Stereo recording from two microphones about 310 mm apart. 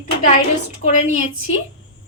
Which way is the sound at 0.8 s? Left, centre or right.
Left.